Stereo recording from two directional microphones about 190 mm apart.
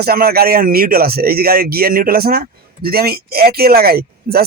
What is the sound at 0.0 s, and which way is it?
Speech, 55° right (ahead or behind).